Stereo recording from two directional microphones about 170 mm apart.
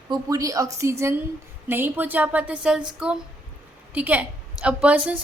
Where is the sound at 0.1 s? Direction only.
20° right (ahead or behind).